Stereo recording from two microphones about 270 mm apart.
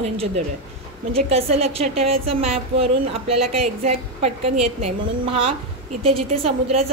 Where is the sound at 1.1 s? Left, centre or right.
Right.